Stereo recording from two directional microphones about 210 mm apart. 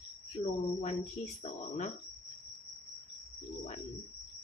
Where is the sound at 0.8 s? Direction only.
30° left (ahead or behind).